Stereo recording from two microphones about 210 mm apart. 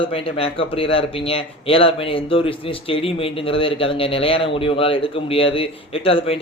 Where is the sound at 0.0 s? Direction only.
25° left (ahead or behind).